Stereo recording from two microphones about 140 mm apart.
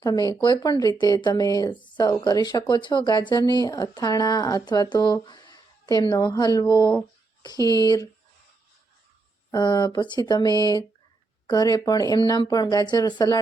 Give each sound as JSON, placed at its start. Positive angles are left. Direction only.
{"t": 0.0, "sound": "a woman's voice", "side_deg": 25}
{"t": 9.5, "sound": "speech", "side_deg": 30}